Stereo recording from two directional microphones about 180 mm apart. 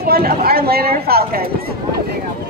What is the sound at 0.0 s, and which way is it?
A woman's voice, 60° right (ahead or behind).